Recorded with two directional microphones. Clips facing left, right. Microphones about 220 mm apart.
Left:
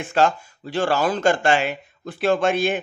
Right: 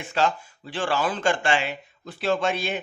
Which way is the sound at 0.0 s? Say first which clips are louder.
Left 5 dB; 50° left (ahead or behind).